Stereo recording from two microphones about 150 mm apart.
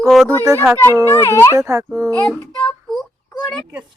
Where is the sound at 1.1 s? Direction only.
15° left (ahead or behind).